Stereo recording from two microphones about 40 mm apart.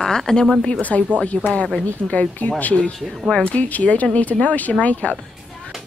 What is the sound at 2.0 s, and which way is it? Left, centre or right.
Speech, left.